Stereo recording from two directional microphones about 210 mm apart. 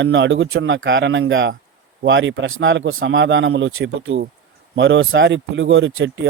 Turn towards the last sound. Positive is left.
turn(degrees=-60)  # may be behind; listen again after turning